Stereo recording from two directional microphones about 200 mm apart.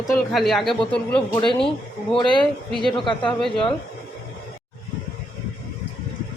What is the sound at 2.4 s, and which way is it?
Speech, centre (ahead or behind).